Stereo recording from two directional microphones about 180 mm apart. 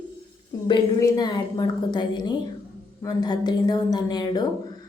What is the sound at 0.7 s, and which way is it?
A woman's voice, 20° left (ahead or behind).